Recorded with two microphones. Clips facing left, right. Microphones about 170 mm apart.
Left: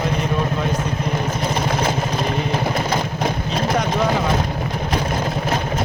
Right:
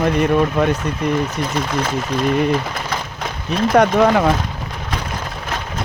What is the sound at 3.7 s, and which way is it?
Speech, 65° right (ahead or behind).